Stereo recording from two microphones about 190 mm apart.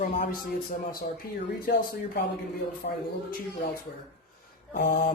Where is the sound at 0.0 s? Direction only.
50° left (ahead or behind).